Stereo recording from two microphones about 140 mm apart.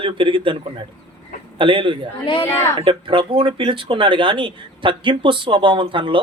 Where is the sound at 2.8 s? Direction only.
35° right (ahead or behind).